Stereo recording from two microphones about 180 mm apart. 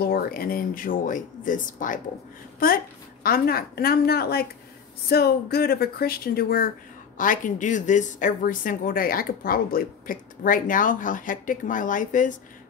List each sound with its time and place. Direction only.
0.0 s speech: 60° left (ahead or behind)
3.3 s speech: 55° left (ahead or behind)